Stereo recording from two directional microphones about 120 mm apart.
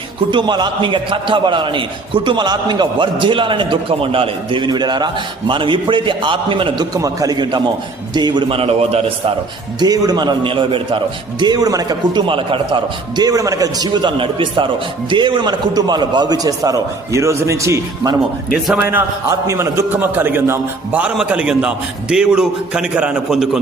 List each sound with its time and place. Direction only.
0.3 s a man's voice: 40° right (ahead or behind)
6.9 s a man's voice: 30° right (ahead or behind); by 9.3 s 55° right (ahead or behind)
9.8 s a man's voice: 35° right (ahead or behind)
18.5 s a man's voice: 5° right (ahead or behind)
18.9 s a man's voice: 20° right (ahead or behind); by 23.6 s 5° right (ahead or behind)